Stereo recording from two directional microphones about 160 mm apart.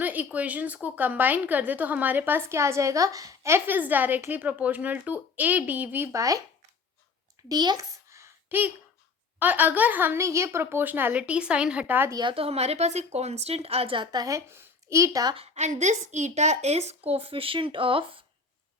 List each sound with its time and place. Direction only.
0.0 s a woman's voice: 10° right (ahead or behind)
7.4 s a sound: 25° right (ahead or behind)
9.4 s a woman's voice: 10° right (ahead or behind)
12.1 s speech: 30° right (ahead or behind)
15.4 s speech: 45° right (ahead or behind)